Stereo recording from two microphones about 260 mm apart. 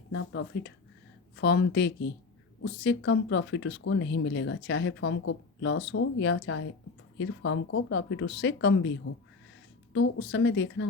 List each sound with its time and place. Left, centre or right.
0.1 s speech: left
9.9 s speech: left